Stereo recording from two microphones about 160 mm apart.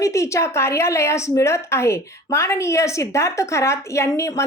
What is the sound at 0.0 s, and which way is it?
A woman's voice, 20° left (ahead or behind).